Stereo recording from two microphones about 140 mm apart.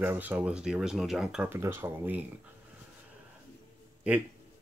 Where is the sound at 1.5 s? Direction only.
15° right (ahead or behind).